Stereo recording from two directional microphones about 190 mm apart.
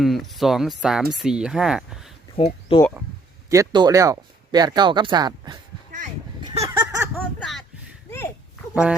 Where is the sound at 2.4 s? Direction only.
30° left (ahead or behind).